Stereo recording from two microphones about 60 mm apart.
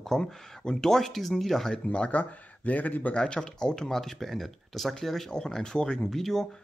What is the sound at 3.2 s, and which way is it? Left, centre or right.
Speech, centre.